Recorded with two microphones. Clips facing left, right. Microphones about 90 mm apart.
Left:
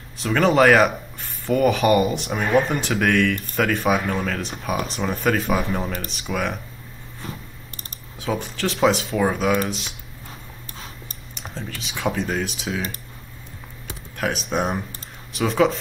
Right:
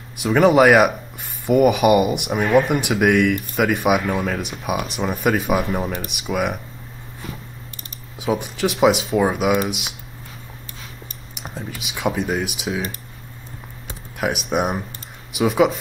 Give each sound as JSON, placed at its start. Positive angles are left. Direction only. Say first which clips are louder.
{"t": 0.2, "sound": "speech", "louder": "right 3 dB", "side_deg": -15}
{"t": 8.2, "sound": "speech", "louder": "right 4 dB", "side_deg": -15}
{"t": 11.3, "sound": "speech", "louder": "right 2 dB", "side_deg": -10}
{"t": 14.1, "sound": "speech", "louder": "right 2 dB", "side_deg": -5}